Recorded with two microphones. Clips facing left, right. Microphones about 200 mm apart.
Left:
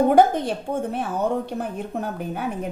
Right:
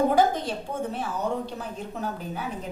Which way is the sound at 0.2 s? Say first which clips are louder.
Left 5 dB; 60° left (ahead or behind).